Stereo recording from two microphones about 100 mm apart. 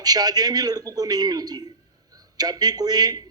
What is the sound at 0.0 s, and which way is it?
A man's voice, 40° right (ahead or behind).